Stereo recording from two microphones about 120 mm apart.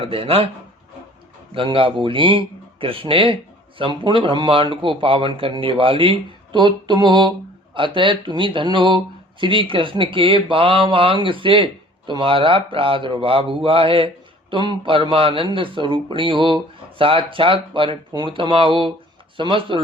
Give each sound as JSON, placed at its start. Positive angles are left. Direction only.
{"t": 0.0, "sound": "speech", "side_deg": -50}
{"t": 1.5, "sound": "speech", "side_deg": -45}